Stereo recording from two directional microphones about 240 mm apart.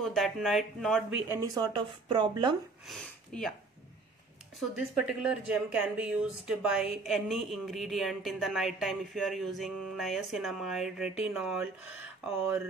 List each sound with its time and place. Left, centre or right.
0.0 s speech: centre
1.3 s speech: centre
2.9 s speech: centre
4.6 s speech: centre